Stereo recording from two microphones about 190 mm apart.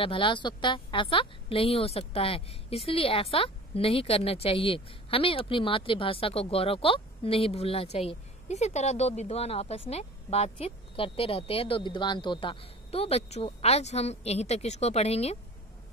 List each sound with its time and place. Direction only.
0.0 s a woman's voice: 25° left (ahead or behind)